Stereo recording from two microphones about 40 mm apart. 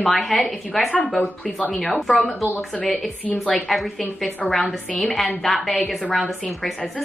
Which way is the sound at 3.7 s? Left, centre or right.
Centre.